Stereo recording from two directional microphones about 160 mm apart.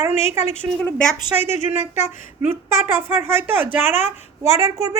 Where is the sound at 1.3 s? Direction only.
10° right (ahead or behind).